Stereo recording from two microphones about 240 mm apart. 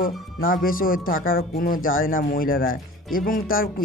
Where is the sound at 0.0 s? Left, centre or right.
Left.